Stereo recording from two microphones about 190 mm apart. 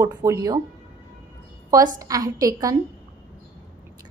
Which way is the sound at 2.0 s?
20° right (ahead or behind).